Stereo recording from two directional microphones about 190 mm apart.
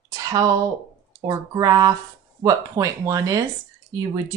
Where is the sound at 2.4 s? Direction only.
15° right (ahead or behind).